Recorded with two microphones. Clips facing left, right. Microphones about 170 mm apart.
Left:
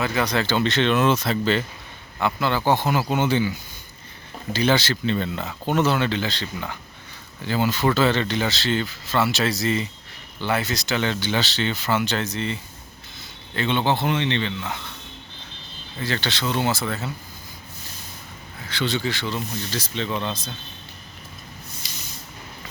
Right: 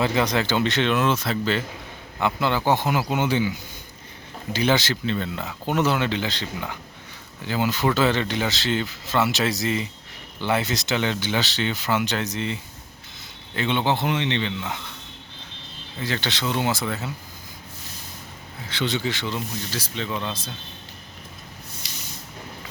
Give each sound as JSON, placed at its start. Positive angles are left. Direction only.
{"t": 0.0, "sound": "speech", "side_deg": -25}
{"t": 2.2, "sound": "speech", "side_deg": -15}
{"t": 4.5, "sound": "speech", "side_deg": -15}
{"t": 5.0, "sound": "speech", "side_deg": 0}
{"t": 13.6, "sound": "speech", "side_deg": -15}
{"t": 16.0, "sound": "speech", "side_deg": -15}
{"t": 18.7, "sound": "speech", "side_deg": -20}
{"t": 21.8, "sound": "a sound", "side_deg": -70}